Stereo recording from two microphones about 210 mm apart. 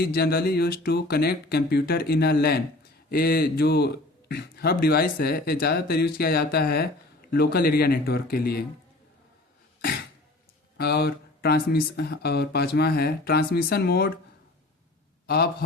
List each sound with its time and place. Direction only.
0.0 s speech: 50° left (ahead or behind)
10.8 s speech: 50° left (ahead or behind)